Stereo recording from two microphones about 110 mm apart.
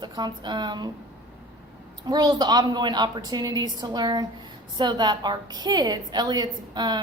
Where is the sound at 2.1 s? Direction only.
40° right (ahead or behind).